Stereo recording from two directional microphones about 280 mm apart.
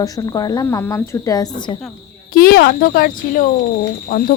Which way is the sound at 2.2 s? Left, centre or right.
Left.